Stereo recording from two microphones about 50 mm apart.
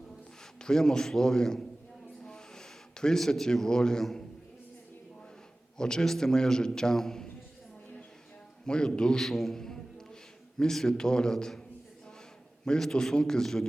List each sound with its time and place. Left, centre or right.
0.6 s a man's voice: centre
2.2 s a sound: centre
5.7 s a man's voice: centre
8.6 s a man's voice: centre
12.6 s a man's voice: centre